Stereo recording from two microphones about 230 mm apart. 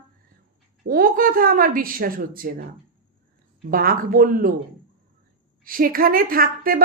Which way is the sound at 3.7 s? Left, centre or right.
Right.